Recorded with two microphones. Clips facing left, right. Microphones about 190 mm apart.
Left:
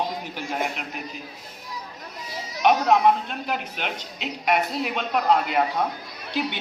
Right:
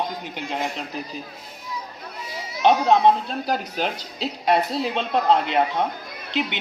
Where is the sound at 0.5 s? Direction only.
30° right (ahead or behind).